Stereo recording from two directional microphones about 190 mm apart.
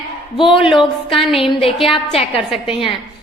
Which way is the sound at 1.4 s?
30° left (ahead or behind).